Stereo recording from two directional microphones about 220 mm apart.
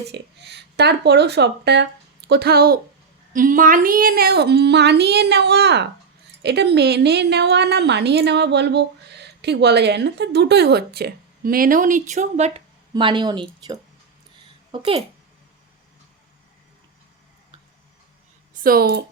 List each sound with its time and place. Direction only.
0.1 s a child's voice: 50° right (ahead or behind); by 15.0 s 25° right (ahead or behind)
18.6 s speech: 45° right (ahead or behind)